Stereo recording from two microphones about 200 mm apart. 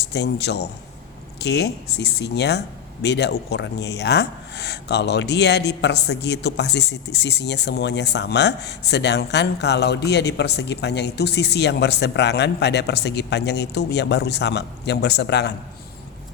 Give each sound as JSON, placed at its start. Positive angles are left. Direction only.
{"t": 0.0, "sound": "speech", "side_deg": 55}